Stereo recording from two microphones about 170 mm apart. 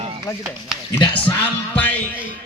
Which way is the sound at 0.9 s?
10° left (ahead or behind).